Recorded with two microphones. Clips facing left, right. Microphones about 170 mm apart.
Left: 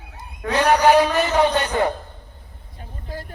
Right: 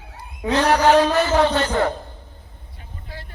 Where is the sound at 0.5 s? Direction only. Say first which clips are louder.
Even; 10° left (ahead or behind).